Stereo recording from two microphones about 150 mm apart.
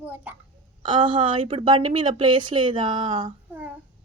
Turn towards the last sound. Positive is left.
turn(degrees=-10)  # may be behind; listen again after turning